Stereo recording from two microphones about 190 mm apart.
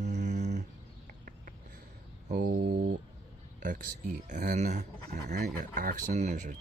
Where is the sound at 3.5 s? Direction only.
45° right (ahead or behind).